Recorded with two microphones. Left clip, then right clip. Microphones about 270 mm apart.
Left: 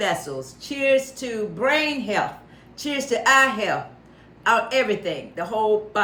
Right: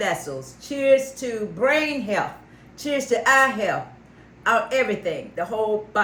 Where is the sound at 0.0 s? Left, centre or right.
Centre.